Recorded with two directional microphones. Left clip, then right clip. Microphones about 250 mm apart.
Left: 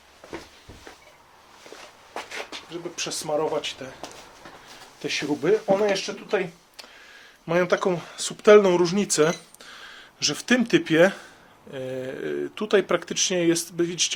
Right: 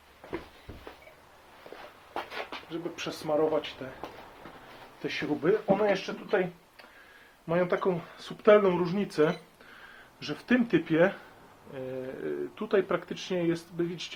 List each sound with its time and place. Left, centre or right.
2.9 s speech: left
5.0 s speech: left
7.4 s speech: left